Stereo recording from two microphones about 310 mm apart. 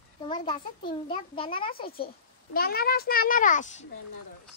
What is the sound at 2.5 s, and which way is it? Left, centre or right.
A child's voice, left.